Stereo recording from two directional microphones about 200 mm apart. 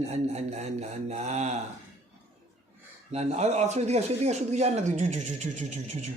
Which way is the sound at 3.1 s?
30° right (ahead or behind).